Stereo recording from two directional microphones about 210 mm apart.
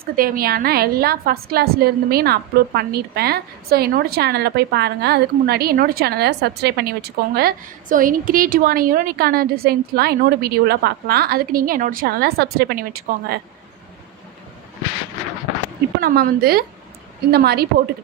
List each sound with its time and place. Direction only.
0.0 s a woman's voice: 45° right (ahead or behind)
16.0 s a woman's voice: 45° right (ahead or behind)